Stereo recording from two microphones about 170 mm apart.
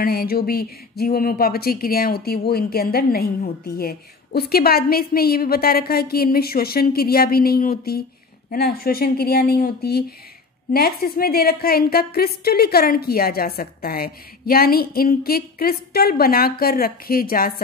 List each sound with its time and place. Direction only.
0.0 s speech: 65° left (ahead or behind)